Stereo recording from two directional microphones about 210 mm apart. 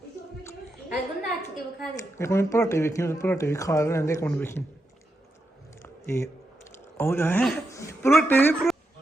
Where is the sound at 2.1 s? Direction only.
15° left (ahead or behind).